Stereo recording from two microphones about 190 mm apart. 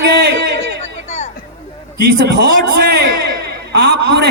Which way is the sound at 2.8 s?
55° right (ahead or behind).